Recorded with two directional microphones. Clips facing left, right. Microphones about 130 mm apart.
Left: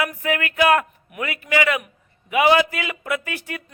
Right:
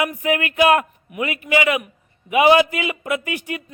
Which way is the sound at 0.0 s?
20° right (ahead or behind).